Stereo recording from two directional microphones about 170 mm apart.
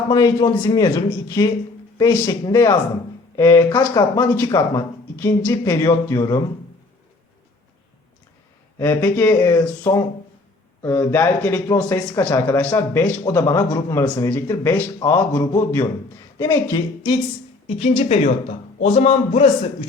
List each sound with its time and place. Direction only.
0.1 s speech: 20° left (ahead or behind)
8.8 s speech: 10° left (ahead or behind)
17.7 s a man's voice: 35° left (ahead or behind)